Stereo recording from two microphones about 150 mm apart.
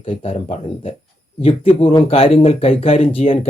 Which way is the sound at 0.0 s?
40° left (ahead or behind).